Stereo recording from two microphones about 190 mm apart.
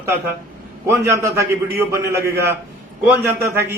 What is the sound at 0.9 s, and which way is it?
A man's voice, 15° right (ahead or behind).